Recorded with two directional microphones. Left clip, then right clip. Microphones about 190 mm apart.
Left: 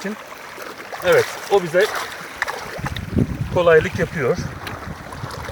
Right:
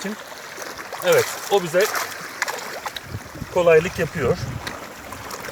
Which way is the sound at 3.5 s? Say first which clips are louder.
Left 1 dB; centre (ahead or behind).